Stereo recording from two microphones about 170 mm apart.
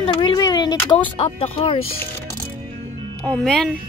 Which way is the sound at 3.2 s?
5° left (ahead or behind).